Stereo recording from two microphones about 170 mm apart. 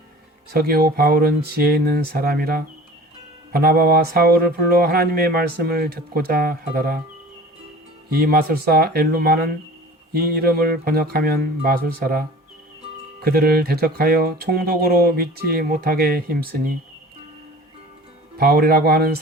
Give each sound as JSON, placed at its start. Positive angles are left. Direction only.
{"t": 0.5, "sound": "speech", "side_deg": -65}
{"t": 8.1, "sound": "speech", "side_deg": -65}
{"t": 13.2, "sound": "speech", "side_deg": -65}
{"t": 18.3, "sound": "speech", "side_deg": -65}